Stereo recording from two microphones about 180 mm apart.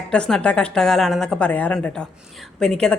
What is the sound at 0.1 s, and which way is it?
A woman's voice, 5° left (ahead or behind).